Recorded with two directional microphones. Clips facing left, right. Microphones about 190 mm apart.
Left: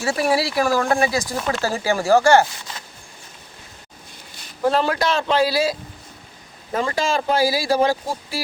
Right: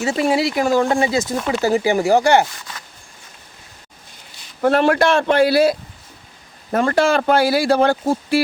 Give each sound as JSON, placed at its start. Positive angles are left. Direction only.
{"t": 0.0, "sound": "speech", "side_deg": -20}
{"t": 4.6, "sound": "speech", "side_deg": -60}